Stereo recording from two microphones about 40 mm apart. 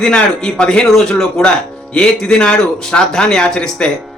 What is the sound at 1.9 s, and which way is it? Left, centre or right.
Speech, left.